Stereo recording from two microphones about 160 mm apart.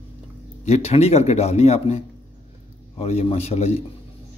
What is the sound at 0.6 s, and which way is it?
Speech, 40° left (ahead or behind).